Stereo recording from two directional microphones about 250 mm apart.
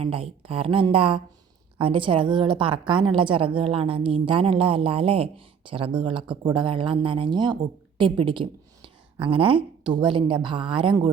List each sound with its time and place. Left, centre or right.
0.0 s a woman's voice: right